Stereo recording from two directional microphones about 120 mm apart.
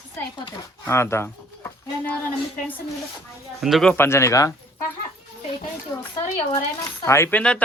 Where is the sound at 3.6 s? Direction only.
Centre (ahead or behind).